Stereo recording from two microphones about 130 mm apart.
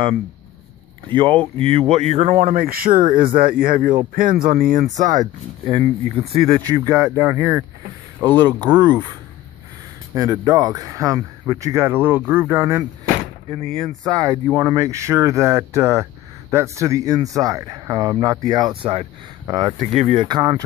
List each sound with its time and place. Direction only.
1.1 s speech: 40° right (ahead or behind); by 2.3 s 55° right (ahead or behind)
2.3 s speech: 90° right
5.7 s speech: 40° right (ahead or behind)
6.7 s speech: 25° right (ahead or behind)
8.2 s speech: 30° right (ahead or behind)
10.1 s speech: 30° right (ahead or behind)
13.6 s speech: 45° right (ahead or behind)
14.1 s speech: 30° right (ahead or behind)
18.8 s speech: 45° right (ahead or behind)
19.4 s speech: 30° right (ahead or behind)
19.8 s speech: 70° right (ahead or behind)
20.2 s speech: 35° right (ahead or behind)